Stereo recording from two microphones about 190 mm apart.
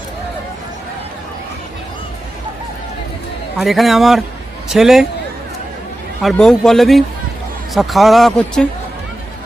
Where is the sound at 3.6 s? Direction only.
Centre (ahead or behind).